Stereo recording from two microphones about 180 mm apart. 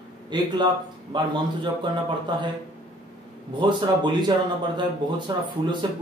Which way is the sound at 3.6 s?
25° right (ahead or behind).